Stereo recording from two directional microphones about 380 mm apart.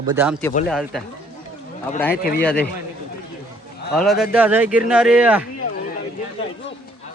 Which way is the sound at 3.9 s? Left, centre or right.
Centre.